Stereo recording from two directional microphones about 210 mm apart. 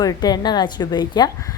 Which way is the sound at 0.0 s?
20° left (ahead or behind).